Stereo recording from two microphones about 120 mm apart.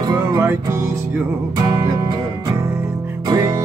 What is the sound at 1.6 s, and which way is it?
Music, 35° right (ahead or behind).